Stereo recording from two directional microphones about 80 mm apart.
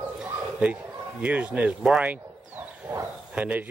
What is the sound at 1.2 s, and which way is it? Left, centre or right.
Speech, centre.